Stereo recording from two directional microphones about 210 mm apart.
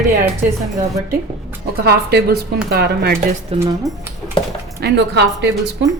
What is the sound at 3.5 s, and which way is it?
Speech, 30° right (ahead or behind).